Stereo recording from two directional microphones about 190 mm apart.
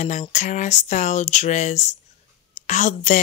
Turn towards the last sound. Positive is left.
turn(degrees=40)  # may be behind; listen again after turning